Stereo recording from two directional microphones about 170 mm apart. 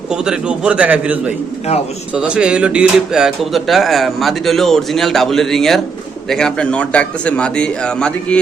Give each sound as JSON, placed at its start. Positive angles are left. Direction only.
{"t": 0.1, "sound": "a man's voice", "side_deg": -5}